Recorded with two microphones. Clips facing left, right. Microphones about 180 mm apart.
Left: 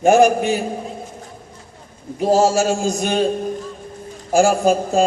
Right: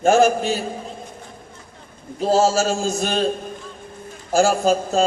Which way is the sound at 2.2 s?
15° left (ahead or behind).